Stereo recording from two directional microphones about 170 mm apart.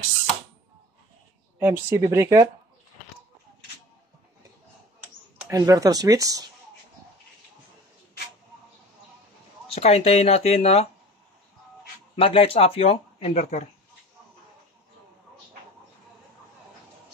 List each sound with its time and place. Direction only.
1.6 s speech: 15° right (ahead or behind)
5.4 s speech: 20° right (ahead or behind)
9.7 s speech: 35° left (ahead or behind)
12.2 s speech: 35° left (ahead or behind)